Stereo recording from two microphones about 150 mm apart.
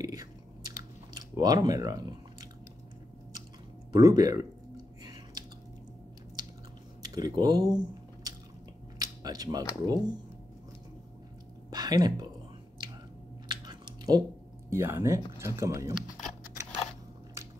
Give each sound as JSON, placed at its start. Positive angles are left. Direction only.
{"t": 0.0, "sound": "chewing", "side_deg": -25}
{"t": 3.9, "sound": "a sound", "side_deg": -25}
{"t": 7.0, "sound": "squish", "side_deg": -25}
{"t": 8.9, "sound": "speech", "side_deg": -25}
{"t": 11.7, "sound": "speech", "side_deg": -25}
{"t": 13.5, "sound": "chewing", "side_deg": -30}
{"t": 14.7, "sound": "speech", "side_deg": -15}